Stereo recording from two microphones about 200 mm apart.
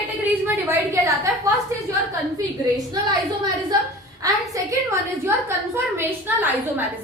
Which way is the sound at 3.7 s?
20° right (ahead or behind).